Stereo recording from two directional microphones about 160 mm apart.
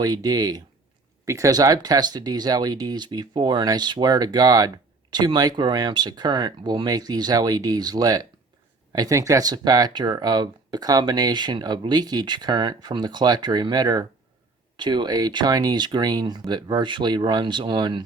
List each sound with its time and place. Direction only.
0.0 s speech: 25° right (ahead or behind)